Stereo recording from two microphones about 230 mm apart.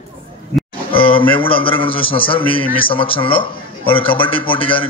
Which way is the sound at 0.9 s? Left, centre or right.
Left.